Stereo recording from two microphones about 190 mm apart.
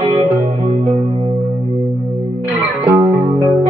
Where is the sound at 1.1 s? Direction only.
25° right (ahead or behind).